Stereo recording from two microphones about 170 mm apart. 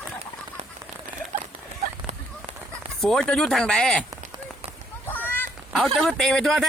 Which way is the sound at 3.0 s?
5° left (ahead or behind).